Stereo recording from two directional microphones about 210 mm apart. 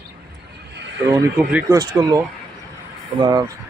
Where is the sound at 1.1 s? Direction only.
10° right (ahead or behind).